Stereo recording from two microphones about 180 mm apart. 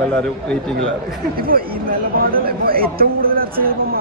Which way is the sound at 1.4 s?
55° right (ahead or behind).